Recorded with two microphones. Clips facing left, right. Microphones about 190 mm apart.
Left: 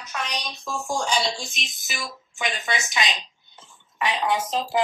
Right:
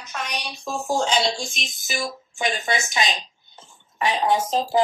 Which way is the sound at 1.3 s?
45° right (ahead or behind).